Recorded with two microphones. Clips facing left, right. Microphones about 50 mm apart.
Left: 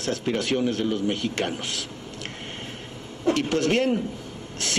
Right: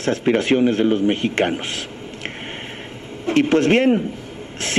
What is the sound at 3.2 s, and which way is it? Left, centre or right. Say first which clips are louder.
Speech: right 7 dB; right.